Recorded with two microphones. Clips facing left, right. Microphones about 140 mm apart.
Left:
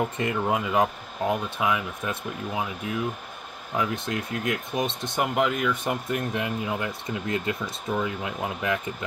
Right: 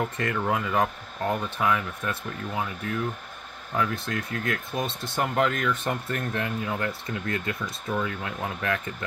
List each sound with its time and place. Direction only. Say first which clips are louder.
0.0 s speech: left 2 dB; 20° left (ahead or behind)